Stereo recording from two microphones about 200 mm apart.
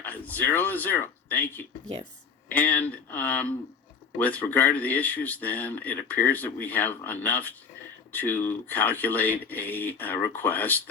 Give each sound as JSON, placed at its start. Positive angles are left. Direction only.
{"t": 0.0, "sound": "speech", "side_deg": 10}